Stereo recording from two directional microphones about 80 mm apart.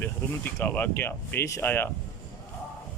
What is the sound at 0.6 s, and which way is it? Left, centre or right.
Speech, left.